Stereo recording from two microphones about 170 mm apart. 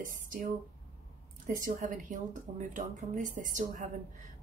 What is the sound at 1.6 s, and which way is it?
Speech, 55° right (ahead or behind).